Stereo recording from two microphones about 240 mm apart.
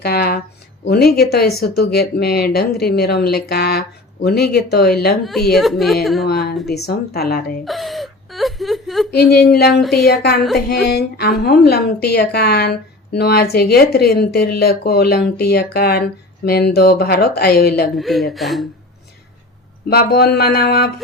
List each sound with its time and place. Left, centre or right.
0.0 s speech: left
5.2 s a woman's voice: centre
6.2 s speech: left
7.6 s whimper: centre
9.3 s speech: left
17.9 s a woman's voice: centre
19.9 s speech: left